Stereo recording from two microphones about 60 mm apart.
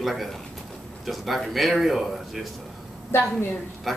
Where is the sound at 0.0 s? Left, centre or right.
Centre.